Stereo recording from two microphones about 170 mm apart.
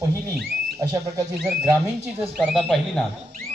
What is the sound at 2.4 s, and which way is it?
Speech, centre (ahead or behind).